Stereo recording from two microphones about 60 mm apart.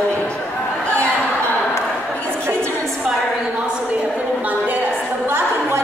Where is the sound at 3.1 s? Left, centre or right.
Centre; by 5.8 s right.